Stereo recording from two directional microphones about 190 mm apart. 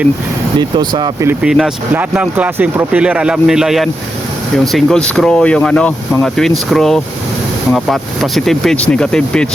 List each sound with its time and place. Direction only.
0.6 s speech: 20° right (ahead or behind)
1.3 s speech: 5° right (ahead or behind)